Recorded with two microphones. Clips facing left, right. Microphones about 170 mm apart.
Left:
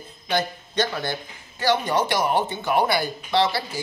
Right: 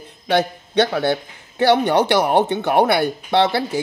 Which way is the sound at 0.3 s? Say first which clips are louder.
Right 6 dB; 65° right (ahead or behind).